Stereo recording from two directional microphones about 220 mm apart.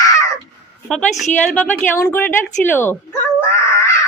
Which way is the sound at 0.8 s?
Centre (ahead or behind).